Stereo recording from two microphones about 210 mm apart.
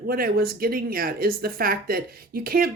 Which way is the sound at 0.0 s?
45° right (ahead or behind).